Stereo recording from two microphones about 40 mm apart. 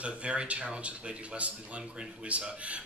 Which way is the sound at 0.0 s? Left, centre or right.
Right.